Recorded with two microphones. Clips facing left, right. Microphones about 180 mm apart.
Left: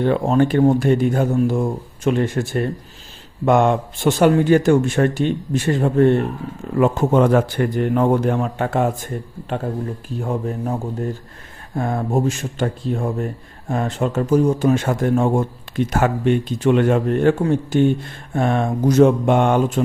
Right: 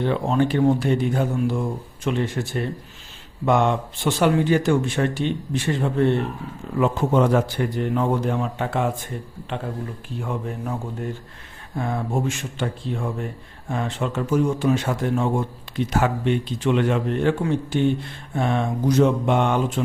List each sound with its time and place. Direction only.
0.0 s speech: 50° left (ahead or behind)
10.2 s speech: 40° left (ahead or behind)